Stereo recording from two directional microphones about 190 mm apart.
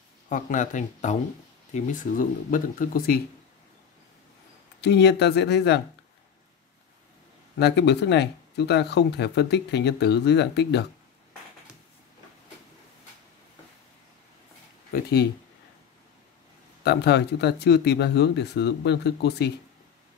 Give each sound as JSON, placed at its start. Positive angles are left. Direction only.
{"t": 0.3, "sound": "speech", "side_deg": 40}
{"t": 4.8, "sound": "speech", "side_deg": 65}
{"t": 7.5, "sound": "speech", "side_deg": 60}
{"t": 14.9, "sound": "speech", "side_deg": 55}
{"t": 16.8, "sound": "speech", "side_deg": 60}